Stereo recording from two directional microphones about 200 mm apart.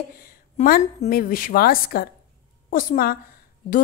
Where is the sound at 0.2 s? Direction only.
45° left (ahead or behind).